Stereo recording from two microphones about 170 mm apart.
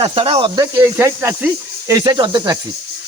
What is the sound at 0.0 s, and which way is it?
Speech, 35° right (ahead or behind).